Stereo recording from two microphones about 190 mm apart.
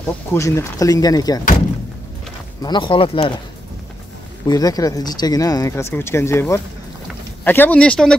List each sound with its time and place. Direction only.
0.3 s speech: 15° left (ahead or behind)
2.6 s speech: 25° left (ahead or behind)
4.5 s speech: 20° left (ahead or behind)